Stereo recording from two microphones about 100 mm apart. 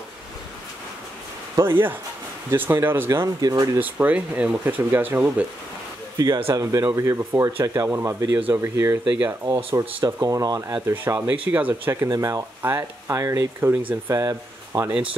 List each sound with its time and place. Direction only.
1.6 s speech: 25° right (ahead or behind)
3.3 s speech: 40° right (ahead or behind)
3.8 s speech: 15° right (ahead or behind)
6.1 s speech: 40° right (ahead or behind)
9.1 s speech: 15° right (ahead or behind)
10.0 s speech: 35° right (ahead or behind)
11.5 s speech: 20° right (ahead or behind)